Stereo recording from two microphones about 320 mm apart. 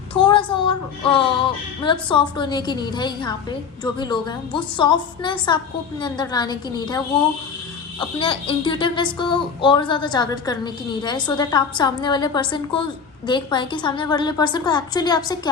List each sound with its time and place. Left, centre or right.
0.1 s a woman's voice: centre